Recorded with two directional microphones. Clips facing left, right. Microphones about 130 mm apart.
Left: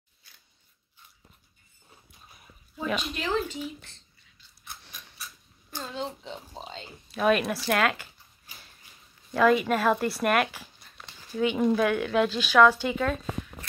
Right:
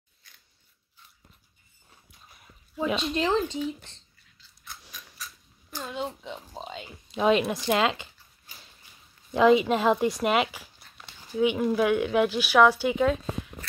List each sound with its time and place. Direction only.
3.0 s speech: 35° right (ahead or behind)
3.3 s speech: 5° left (ahead or behind)
5.8 s speech: 10° right (ahead or behind)
9.3 s speech: 20° right (ahead or behind)
10.2 s zipper: 15° right (ahead or behind)
11.5 s speech: 5° right (ahead or behind)